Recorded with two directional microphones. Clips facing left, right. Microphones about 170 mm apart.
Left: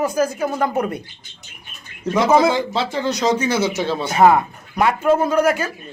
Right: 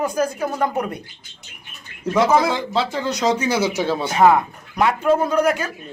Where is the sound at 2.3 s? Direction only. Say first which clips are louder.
Left 5 dB; 20° left (ahead or behind).